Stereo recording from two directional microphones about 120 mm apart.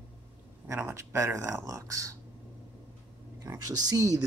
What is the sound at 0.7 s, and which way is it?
Speech, 20° right (ahead or behind).